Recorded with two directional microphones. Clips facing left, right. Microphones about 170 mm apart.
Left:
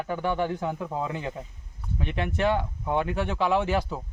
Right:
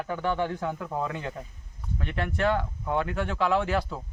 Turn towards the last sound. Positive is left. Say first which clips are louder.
# left 1 dB
turn(degrees=20)  # may be behind; listen again after turning